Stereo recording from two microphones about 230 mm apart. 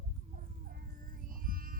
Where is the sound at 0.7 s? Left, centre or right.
Right.